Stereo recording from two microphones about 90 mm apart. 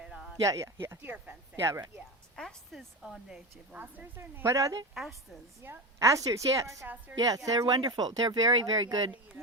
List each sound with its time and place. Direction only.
0.0 s a sound: 10° right (ahead or behind)
0.4 s a woman's voice: 35° right (ahead or behind)
2.3 s a woman's voice: 5° left (ahead or behind)
3.8 s a woman's voice: 20° right (ahead or behind); by 6.8 s 35° right (ahead or behind)
6.8 s a woman's voice: 15° right (ahead or behind)
7.2 s a woman's voice: 40° right (ahead or behind)
7.8 s speech: 50° right (ahead or behind)